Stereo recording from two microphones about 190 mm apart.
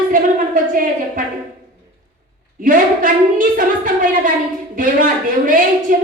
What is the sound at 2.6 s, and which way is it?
A woman's voice, 45° right (ahead or behind).